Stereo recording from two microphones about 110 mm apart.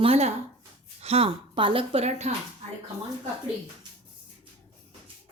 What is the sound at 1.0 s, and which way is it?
Speech, 60° right (ahead or behind).